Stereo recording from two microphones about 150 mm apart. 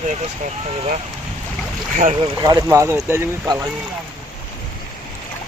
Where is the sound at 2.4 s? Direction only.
25° right (ahead or behind).